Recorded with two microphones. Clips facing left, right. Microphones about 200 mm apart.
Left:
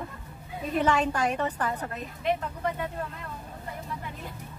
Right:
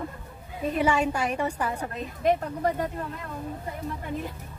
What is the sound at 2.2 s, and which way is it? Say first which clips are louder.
Speech: right 5 dB; 40° right (ahead or behind).